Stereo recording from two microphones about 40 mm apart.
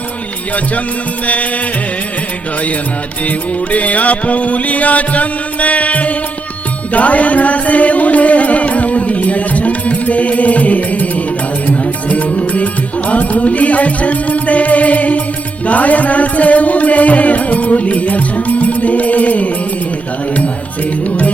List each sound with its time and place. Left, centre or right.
3.2 s music: left